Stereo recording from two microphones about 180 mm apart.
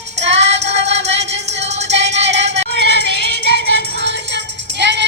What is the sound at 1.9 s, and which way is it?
Music, 75° right (ahead or behind).